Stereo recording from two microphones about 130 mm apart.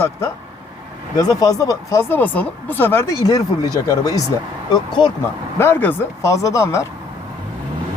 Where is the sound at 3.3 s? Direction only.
30° left (ahead or behind).